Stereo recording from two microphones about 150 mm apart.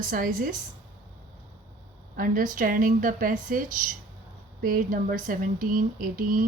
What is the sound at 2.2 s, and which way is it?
Speech, 65° right (ahead or behind).